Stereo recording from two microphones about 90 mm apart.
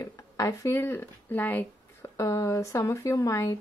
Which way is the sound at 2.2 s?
35° left (ahead or behind).